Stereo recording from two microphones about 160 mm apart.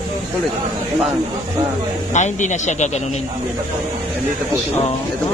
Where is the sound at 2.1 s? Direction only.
50° left (ahead or behind).